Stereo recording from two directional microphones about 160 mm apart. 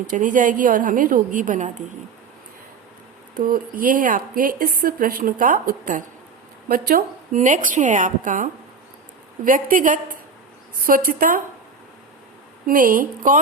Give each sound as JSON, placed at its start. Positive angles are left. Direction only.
{"t": 0.1, "sound": "speech", "side_deg": -55}
{"t": 3.3, "sound": "speech", "side_deg": -60}
{"t": 6.7, "sound": "a woman's voice", "side_deg": -65}
{"t": 12.6, "sound": "speech", "side_deg": -60}